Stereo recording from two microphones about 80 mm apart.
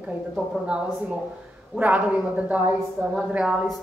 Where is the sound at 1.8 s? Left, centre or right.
Centre.